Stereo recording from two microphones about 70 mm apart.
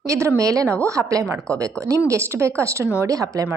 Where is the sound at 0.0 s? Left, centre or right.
Right.